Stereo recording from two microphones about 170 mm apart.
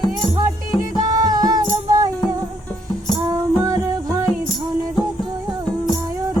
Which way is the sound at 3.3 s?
20° right (ahead or behind).